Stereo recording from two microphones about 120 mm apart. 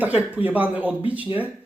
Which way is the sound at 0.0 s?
10° right (ahead or behind).